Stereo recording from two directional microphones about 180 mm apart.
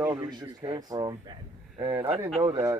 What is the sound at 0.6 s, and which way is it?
Speech, 20° right (ahead or behind).